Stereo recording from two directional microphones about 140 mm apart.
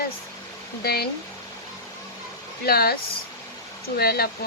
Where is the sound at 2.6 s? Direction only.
90° left.